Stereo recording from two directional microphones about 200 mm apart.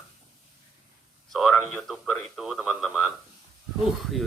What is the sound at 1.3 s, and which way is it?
A man's voice, centre (ahead or behind).